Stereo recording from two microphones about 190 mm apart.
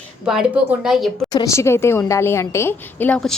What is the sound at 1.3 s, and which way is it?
A woman's voice, 15° left (ahead or behind).